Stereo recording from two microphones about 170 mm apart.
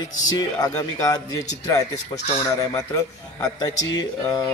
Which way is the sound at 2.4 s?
20° left (ahead or behind).